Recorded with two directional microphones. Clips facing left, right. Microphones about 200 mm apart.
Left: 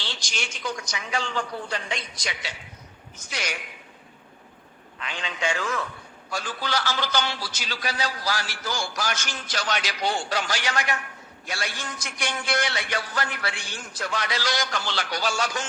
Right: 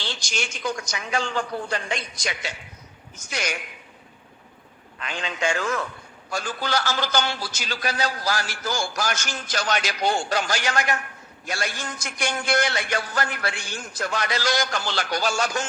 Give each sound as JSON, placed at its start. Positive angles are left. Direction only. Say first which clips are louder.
{"t": 0.0, "sound": "a man's voice", "louder": "right 4 dB", "side_deg": -45}
{"t": 4.9, "sound": "a man's voice", "louder": "right 3 dB", "side_deg": -45}